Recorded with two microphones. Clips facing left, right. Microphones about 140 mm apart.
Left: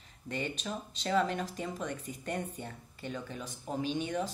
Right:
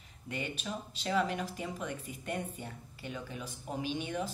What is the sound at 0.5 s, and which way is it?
Speech, 5° right (ahead or behind).